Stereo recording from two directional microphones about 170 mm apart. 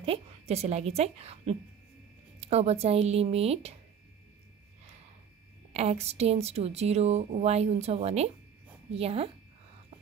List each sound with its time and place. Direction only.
0.0 s speech: 35° right (ahead or behind)
5.7 s speech: 35° right (ahead or behind)